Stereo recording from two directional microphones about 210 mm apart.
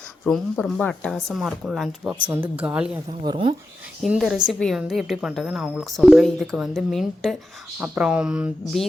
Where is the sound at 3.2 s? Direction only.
25° right (ahead or behind).